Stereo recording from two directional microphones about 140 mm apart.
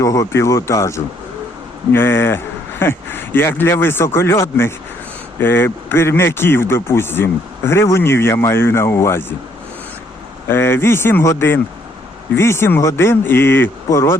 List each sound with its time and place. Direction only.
0.0 s speech: 25° left (ahead or behind)
10.5 s speech: 15° left (ahead or behind)